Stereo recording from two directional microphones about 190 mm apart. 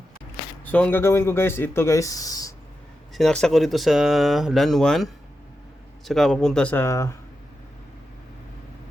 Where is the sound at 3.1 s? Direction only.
Centre (ahead or behind).